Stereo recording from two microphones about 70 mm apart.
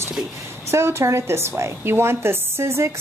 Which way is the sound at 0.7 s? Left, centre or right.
Right.